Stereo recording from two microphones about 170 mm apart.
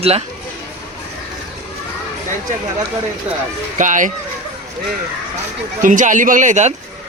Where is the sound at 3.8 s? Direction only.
50° right (ahead or behind).